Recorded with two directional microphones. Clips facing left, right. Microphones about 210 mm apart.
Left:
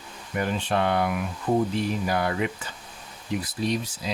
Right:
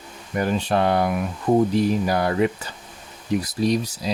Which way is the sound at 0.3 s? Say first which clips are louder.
Right 4 dB; 40° right (ahead or behind).